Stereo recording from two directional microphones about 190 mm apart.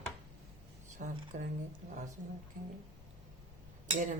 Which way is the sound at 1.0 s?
40° right (ahead or behind).